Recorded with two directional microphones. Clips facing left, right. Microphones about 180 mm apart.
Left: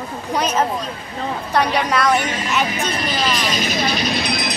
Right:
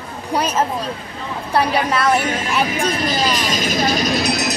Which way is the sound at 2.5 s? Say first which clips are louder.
Right 1 dB; 35° right (ahead or behind).